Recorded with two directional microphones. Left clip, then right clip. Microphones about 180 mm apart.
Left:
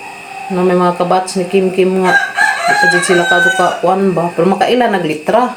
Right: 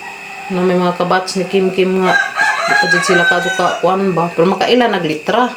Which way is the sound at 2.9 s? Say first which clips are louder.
Left 1 dB; 10° right (ahead or behind).